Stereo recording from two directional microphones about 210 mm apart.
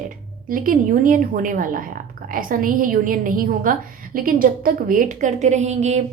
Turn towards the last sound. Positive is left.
turn(degrees=-35)  # may be behind; listen again after turning